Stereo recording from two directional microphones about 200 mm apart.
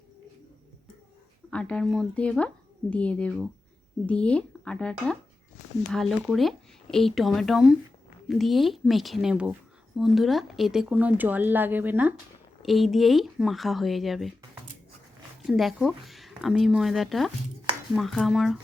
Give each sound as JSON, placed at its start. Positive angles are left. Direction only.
{"t": 1.5, "sound": "speech", "side_deg": 5}
{"t": 15.4, "sound": "speech", "side_deg": -5}